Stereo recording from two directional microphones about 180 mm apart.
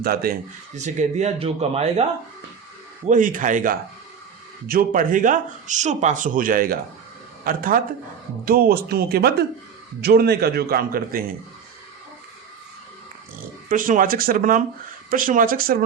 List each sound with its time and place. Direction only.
0.0 s a man's voice: 55° right (ahead or behind)
0.8 s speech: 40° right (ahead or behind)
3.1 s a man's voice: 45° right (ahead or behind)
13.7 s speech: 45° right (ahead or behind)